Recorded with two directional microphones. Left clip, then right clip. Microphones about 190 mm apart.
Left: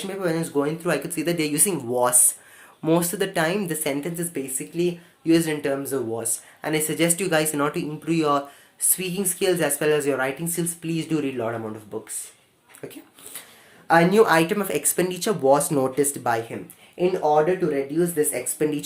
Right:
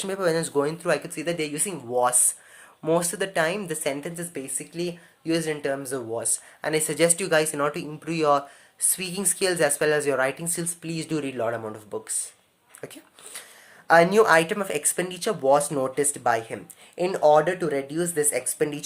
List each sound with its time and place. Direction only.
0.0 s speech: 35° right (ahead or behind); by 2.1 s centre (ahead or behind)
2.8 s speech: 15° right (ahead or behind); by 12.1 s 30° right (ahead or behind)
12.8 s a sound: 25° right (ahead or behind)
13.8 s speech: 20° right (ahead or behind)
16.9 s speech: 40° right (ahead or behind)
17.9 s speech: 30° right (ahead or behind)